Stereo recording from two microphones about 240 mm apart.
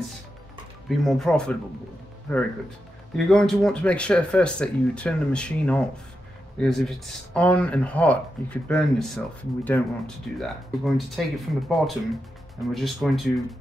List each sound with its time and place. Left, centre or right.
0.8 s speech: centre
3.3 s speech: centre